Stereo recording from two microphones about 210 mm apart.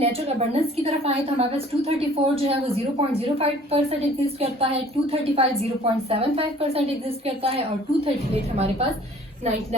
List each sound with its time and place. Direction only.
0.0 s a woman's voice: 30° right (ahead or behind)